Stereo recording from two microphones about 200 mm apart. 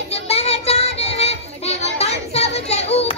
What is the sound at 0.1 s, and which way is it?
Child singing, 30° left (ahead or behind).